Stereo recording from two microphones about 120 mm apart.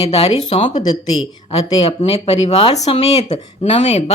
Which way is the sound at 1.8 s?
55° left (ahead or behind).